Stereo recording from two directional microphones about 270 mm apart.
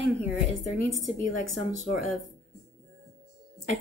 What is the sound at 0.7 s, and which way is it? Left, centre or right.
Speech, right.